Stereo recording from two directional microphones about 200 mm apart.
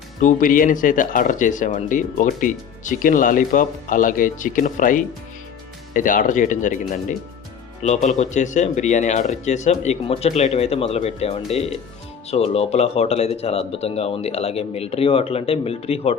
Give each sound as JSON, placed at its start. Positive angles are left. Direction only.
{"t": 0.2, "sound": "speech", "side_deg": 40}